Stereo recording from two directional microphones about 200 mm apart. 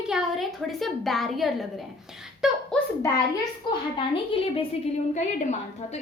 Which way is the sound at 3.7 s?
25° left (ahead or behind).